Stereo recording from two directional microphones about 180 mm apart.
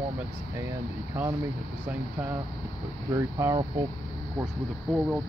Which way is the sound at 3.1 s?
20° right (ahead or behind).